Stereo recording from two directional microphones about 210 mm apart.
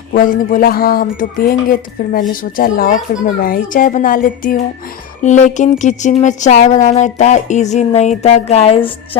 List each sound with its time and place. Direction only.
0.1 s speech: 40° left (ahead or behind)